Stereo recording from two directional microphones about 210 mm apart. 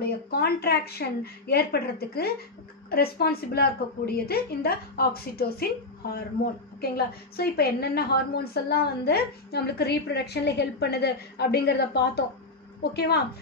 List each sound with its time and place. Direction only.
0.0 s a woman's voice: 50° left (ahead or behind)
7.3 s a woman's voice: 50° left (ahead or behind)